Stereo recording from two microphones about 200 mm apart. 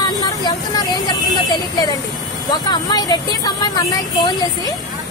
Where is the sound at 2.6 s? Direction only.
20° left (ahead or behind).